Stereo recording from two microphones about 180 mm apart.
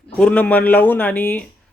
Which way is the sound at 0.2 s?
5° left (ahead or behind).